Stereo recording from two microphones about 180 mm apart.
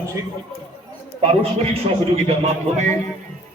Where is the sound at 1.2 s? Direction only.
35° right (ahead or behind).